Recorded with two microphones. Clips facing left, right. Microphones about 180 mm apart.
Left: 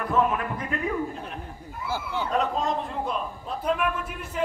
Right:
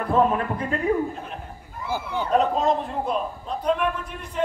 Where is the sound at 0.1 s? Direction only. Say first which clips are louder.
Right 4 dB; 35° right (ahead or behind).